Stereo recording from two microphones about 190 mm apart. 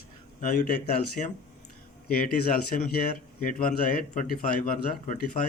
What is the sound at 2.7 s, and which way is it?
Speech, 45° left (ahead or behind).